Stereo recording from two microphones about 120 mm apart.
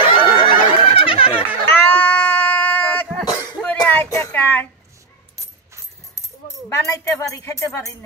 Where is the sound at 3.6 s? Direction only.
15° left (ahead or behind).